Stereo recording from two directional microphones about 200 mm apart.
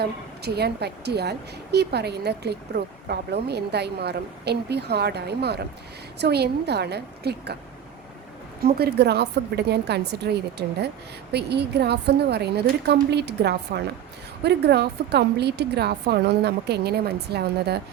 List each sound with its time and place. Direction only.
0.0 s a woman's voice: 55° right (ahead or behind)
8.6 s a woman's voice: 55° right (ahead or behind)